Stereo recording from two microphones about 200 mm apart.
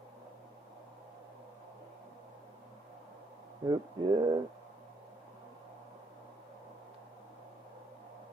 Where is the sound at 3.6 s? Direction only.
20° right (ahead or behind).